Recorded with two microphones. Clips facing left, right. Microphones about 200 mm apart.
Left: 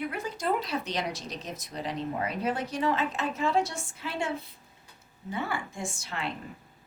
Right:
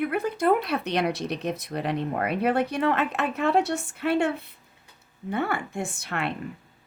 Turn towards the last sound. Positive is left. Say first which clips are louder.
# right 5 dB
turn(degrees=-60)  # may be behind; listen again after turning